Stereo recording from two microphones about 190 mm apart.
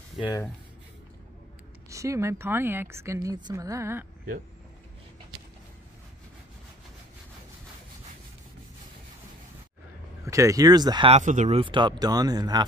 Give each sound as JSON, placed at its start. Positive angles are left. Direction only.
{"t": 1.9, "sound": "a woman's voice", "side_deg": -15}
{"t": 10.2, "sound": "speech", "side_deg": -15}